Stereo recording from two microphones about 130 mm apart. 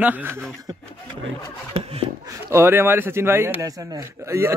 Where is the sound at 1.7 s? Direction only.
50° right (ahead or behind).